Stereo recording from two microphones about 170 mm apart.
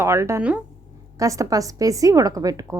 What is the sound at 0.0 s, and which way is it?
A woman's voice, 15° right (ahead or behind).